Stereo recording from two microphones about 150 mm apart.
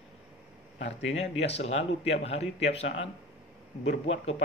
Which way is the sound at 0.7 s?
50° left (ahead or behind).